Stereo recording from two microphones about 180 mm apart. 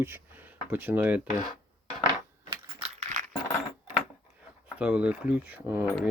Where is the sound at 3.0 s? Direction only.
40° right (ahead or behind).